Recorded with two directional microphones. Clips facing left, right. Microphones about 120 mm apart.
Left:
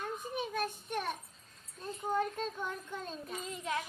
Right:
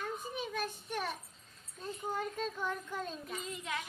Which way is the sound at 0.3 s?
50° left (ahead or behind).